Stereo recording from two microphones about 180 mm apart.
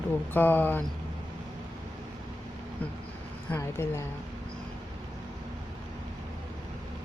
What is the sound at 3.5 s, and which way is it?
Speech, 15° left (ahead or behind).